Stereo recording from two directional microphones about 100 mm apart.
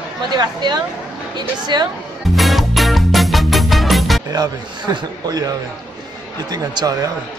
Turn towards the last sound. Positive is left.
turn(degrees=-40)  # may be behind; listen again after turning